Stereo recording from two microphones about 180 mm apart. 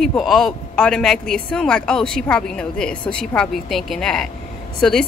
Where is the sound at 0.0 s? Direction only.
Centre (ahead or behind).